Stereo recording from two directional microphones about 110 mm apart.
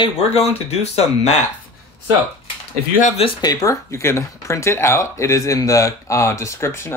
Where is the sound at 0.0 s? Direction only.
65° left (ahead or behind).